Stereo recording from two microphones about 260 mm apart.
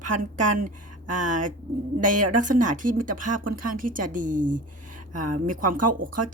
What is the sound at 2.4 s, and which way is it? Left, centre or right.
A woman's voice, right.